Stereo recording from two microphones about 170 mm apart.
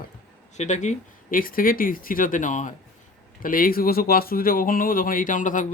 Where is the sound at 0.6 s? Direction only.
45° left (ahead or behind).